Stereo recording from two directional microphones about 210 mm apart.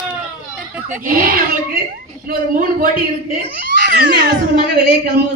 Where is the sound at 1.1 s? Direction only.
40° right (ahead or behind).